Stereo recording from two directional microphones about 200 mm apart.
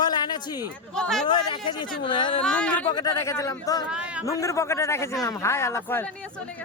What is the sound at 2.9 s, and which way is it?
Speech, 15° left (ahead or behind).